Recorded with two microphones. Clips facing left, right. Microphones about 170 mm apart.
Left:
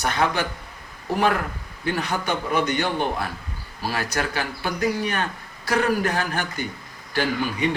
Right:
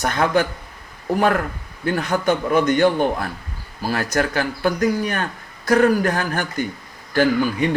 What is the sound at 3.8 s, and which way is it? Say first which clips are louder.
A man's voice: right 5 dB; 45° right (ahead or behind).